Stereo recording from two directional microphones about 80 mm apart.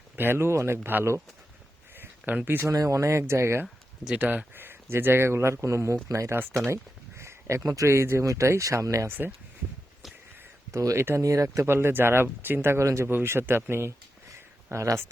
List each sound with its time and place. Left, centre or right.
0.2 s speech: right
2.0 s a sound: right
2.6 s speech: right
4.0 s speech: centre; by 9.0 s right
9.0 s speech: right
10.7 s speech: right
14.3 s a sound: right